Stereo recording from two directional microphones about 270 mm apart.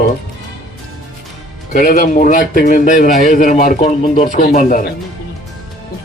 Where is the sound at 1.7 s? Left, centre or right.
Left.